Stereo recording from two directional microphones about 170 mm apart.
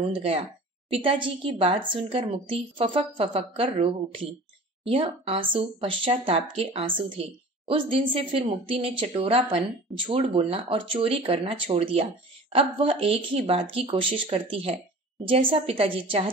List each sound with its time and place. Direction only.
0.0 s a woman's voice: 35° right (ahead or behind)